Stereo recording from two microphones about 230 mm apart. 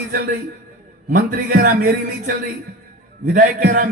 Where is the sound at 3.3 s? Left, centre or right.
Right.